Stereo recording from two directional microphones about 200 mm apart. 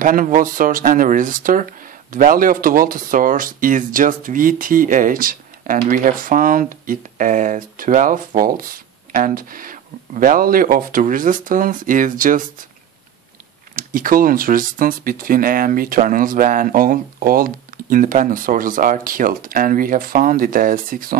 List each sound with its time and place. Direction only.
0.0 s speech: 45° right (ahead or behind)
13.7 s speech: 45° right (ahead or behind)